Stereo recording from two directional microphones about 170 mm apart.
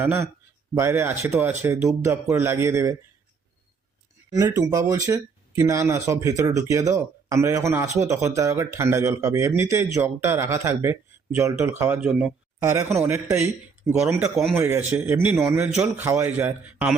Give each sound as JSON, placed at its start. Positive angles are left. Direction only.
{"t": 0.0, "sound": "speech", "side_deg": -15}
{"t": 4.3, "sound": "speech", "side_deg": -20}
{"t": 12.6, "sound": "speech", "side_deg": -15}
{"t": 15.7, "sound": "a man's voice", "side_deg": -5}
{"t": 16.0, "sound": "speech", "side_deg": -15}